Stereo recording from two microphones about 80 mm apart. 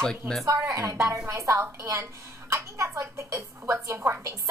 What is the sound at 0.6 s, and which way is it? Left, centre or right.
A woman's voice, right.